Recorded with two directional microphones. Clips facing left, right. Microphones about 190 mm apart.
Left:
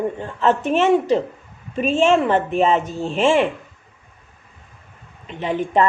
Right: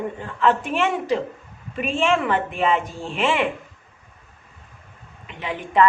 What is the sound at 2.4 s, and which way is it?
Speech, 40° left (ahead or behind).